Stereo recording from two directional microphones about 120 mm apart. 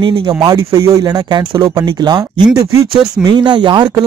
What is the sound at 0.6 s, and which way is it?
Speech, 25° right (ahead or behind).